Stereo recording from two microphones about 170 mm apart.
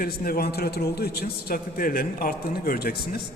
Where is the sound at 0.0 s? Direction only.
60° left (ahead or behind).